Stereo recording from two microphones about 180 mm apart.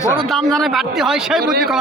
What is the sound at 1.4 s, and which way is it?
Speech, 60° right (ahead or behind).